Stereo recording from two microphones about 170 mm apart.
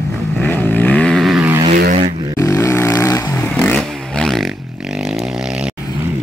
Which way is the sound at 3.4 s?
5° left (ahead or behind).